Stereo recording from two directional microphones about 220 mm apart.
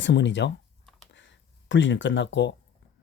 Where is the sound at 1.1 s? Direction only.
55° left (ahead or behind).